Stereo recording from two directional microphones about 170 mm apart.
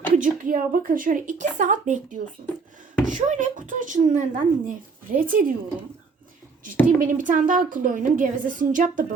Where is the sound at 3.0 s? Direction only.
50° right (ahead or behind).